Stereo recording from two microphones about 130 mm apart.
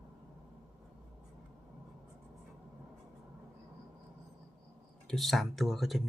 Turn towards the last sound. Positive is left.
turn(degrees=0)  # may be behind; listen again after turning